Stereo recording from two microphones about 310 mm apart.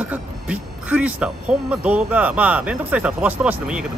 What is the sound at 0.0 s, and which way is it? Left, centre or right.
Speech, centre.